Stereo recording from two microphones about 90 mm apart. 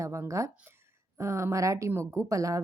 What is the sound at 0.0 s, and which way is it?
A woman's voice, 35° right (ahead or behind).